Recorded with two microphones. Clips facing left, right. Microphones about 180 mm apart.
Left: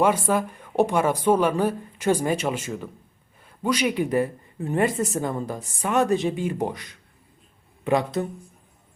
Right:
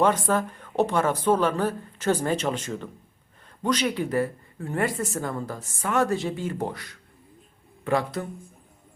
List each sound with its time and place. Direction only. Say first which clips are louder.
0.0 s speech: left 1 dB; 10° left (ahead or behind)